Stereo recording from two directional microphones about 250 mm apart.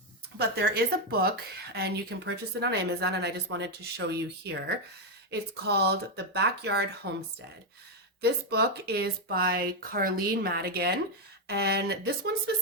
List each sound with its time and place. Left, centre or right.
0.3 s speech: right
8.2 s speech: right